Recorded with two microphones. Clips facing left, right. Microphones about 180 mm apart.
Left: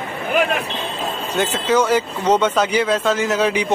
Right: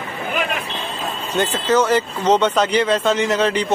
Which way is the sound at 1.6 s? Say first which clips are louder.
Even; 10° left (ahead or behind).